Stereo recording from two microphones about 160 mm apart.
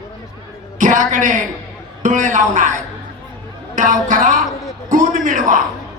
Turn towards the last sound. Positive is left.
turn(degrees=-55)  # may be behind; listen again after turning